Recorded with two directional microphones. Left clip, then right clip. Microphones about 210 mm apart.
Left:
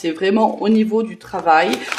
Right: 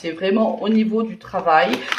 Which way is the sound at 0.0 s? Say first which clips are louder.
Left 3 dB; 50° left (ahead or behind).